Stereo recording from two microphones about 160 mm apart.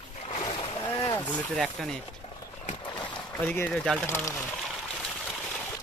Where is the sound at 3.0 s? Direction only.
10° left (ahead or behind).